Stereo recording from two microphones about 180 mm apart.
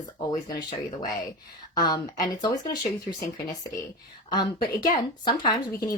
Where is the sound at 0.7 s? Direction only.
20° left (ahead or behind).